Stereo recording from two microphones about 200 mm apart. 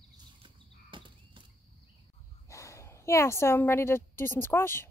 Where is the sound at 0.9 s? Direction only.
25° right (ahead or behind).